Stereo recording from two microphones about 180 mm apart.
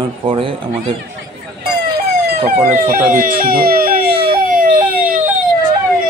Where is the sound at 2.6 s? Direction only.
50° right (ahead or behind).